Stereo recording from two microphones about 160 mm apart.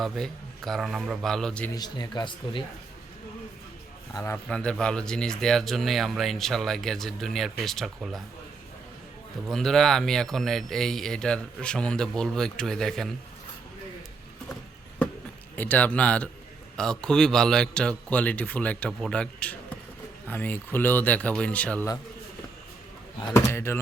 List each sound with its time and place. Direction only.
0.0 s speech: centre (ahead or behind)
1.7 s speech: 25° left (ahead or behind)
4.1 s a man's voice: 15° left (ahead or behind)
4.4 s speech: 5° left (ahead or behind)
9.5 s speech: centre (ahead or behind)
15.5 s a man's voice: 10° left (ahead or behind)
23.2 s a man's voice: 15° left (ahead or behind)